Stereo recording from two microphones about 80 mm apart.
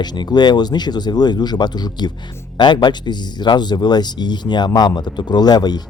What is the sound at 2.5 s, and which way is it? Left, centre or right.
Speech, left.